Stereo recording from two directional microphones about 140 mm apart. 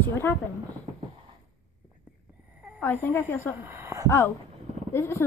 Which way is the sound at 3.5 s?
15° right (ahead or behind).